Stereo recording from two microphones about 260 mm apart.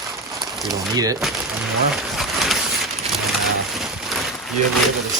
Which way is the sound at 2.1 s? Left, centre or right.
Centre.